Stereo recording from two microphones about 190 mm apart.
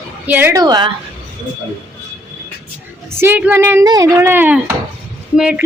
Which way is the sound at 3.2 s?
10° right (ahead or behind).